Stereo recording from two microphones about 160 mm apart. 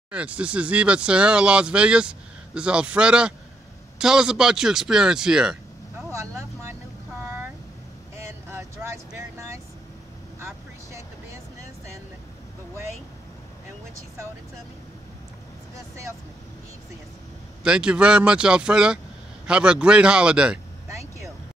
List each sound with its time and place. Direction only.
0.1 s speech: 5° right (ahead or behind)
6.0 s vehicle: 15° right (ahead or behind)
17.6 s speech: 5° right (ahead or behind)
20.9 s vehicle: 20° right (ahead or behind)